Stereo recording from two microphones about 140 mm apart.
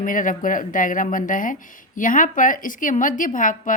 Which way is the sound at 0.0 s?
70° left (ahead or behind).